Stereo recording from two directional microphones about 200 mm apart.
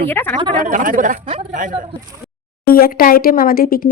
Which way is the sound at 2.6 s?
50° left (ahead or behind).